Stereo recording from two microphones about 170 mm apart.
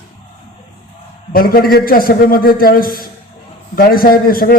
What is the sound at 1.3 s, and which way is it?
A man's voice, 60° left (ahead or behind).